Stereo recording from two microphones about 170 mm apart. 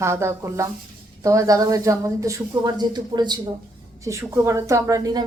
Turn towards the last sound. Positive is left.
turn(degrees=-20)  # may be behind; listen again after turning